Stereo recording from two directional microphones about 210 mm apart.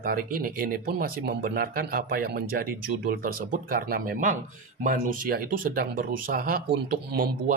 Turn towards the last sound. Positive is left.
turn(degrees=-45)  # may be behind; listen again after turning